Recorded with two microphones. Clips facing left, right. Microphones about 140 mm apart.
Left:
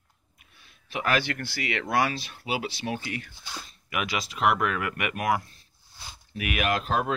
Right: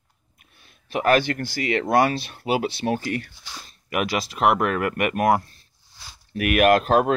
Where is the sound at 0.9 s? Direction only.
45° right (ahead or behind).